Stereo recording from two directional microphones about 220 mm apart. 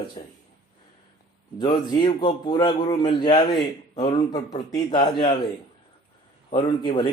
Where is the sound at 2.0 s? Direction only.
20° left (ahead or behind).